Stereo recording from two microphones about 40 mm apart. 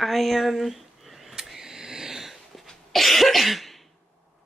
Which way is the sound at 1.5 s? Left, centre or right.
Centre.